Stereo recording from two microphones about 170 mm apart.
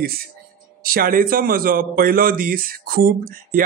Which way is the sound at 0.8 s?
55° right (ahead or behind).